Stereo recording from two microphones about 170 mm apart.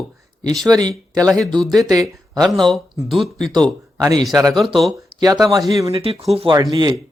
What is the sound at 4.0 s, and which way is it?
Speech, 20° right (ahead or behind).